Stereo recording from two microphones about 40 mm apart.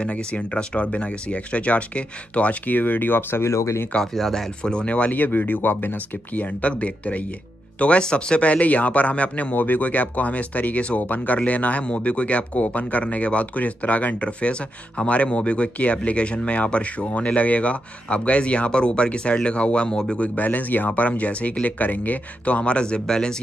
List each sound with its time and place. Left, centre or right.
0.0 s speech: left
4.0 s speech: centre
4.8 s speech: left
5.2 s speech: left
6.6 s speech: left
8.5 s speech: left
9.5 s speech: left
11.0 s speech: left
20.2 s speech: left; by 23.3 s centre